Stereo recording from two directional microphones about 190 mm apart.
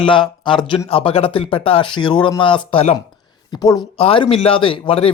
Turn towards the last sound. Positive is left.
turn(degrees=30)  # may be behind; listen again after turning